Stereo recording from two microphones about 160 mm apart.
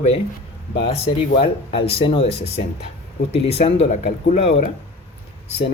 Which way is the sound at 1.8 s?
35° left (ahead or behind).